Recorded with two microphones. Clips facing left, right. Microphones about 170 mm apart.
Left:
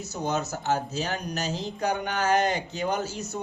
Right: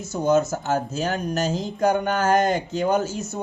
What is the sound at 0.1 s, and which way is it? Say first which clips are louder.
A man's voice: right 10 dB; 50° right (ahead or behind).